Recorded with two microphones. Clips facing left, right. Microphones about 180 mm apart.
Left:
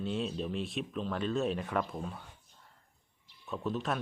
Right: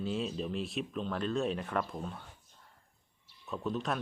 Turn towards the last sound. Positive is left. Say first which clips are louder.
# even
turn(degrees=0)  # may be behind; listen again after turning